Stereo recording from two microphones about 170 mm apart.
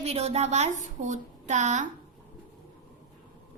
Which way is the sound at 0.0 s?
35° right (ahead or behind).